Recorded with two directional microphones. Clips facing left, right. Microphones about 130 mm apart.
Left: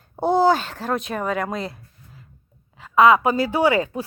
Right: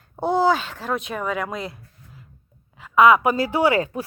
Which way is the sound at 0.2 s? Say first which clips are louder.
Left 2 dB; 35° left (ahead or behind).